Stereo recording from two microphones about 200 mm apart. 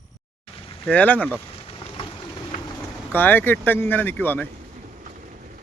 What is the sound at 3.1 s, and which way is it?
Speech, 10° left (ahead or behind).